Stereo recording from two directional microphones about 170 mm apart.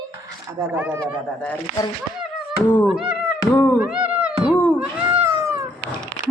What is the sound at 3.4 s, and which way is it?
Cat, 10° left (ahead or behind).